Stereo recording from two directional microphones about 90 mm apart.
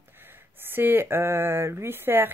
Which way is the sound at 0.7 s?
25° right (ahead or behind).